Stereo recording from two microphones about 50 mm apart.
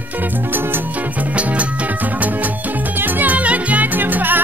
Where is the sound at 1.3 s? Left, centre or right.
Right.